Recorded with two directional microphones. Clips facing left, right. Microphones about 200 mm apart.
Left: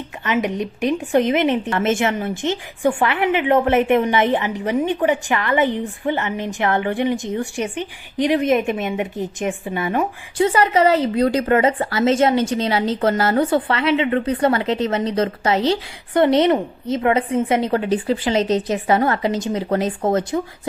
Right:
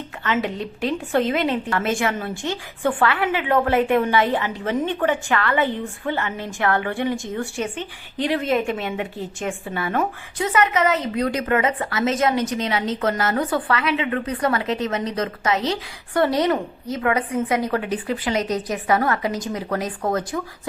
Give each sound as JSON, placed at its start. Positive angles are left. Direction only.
{"t": 0.3, "sound": "speech", "side_deg": 15}
{"t": 10.3, "sound": "speech", "side_deg": 30}